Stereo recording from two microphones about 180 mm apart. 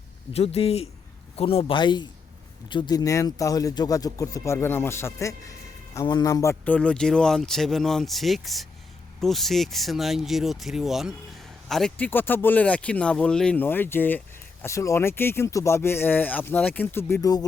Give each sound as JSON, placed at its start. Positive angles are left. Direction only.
{"t": 0.3, "sound": "a man's voice", "side_deg": 35}